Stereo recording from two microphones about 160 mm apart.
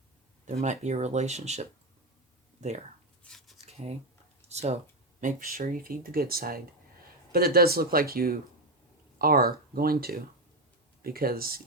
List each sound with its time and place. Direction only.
0.6 s speech: 45° right (ahead or behind)
3.2 s shuffling cards: centre (ahead or behind)
4.4 s speech: 45° right (ahead or behind)
5.2 s speech: 60° right (ahead or behind)